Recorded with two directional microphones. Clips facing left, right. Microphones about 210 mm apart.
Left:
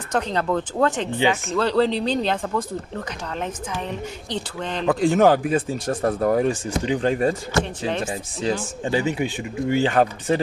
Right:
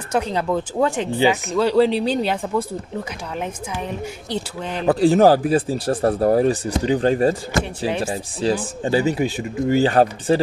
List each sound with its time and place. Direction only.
0.1 s speech: 10° right (ahead or behind)
4.8 s speech: 35° right (ahead or behind)
7.8 s speech: 10° right (ahead or behind)
8.4 s speech: 35° right (ahead or behind)